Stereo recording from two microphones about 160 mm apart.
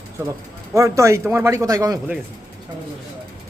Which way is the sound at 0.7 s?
20° right (ahead or behind).